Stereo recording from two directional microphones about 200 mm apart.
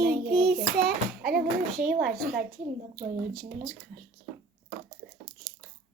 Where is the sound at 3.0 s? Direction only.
45° right (ahead or behind).